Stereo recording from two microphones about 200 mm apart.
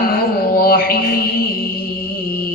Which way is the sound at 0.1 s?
50° left (ahead or behind).